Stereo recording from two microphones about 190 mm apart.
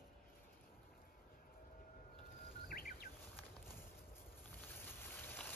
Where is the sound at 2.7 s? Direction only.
50° left (ahead or behind).